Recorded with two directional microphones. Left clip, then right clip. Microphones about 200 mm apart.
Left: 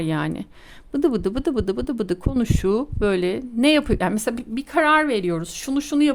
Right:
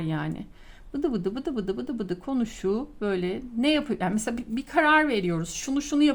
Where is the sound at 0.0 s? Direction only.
40° left (ahead or behind).